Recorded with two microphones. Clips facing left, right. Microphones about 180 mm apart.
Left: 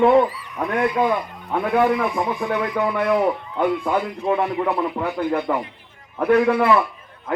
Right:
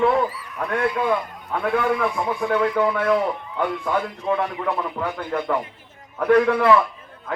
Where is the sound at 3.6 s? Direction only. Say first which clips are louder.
Left 3 dB; 15° left (ahead or behind).